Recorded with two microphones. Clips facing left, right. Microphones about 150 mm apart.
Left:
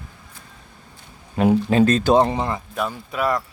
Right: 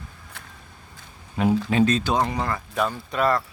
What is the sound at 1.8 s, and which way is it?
Speech, 50° left (ahead or behind).